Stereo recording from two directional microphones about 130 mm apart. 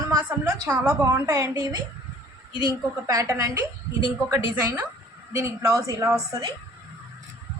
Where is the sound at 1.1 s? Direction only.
25° right (ahead or behind).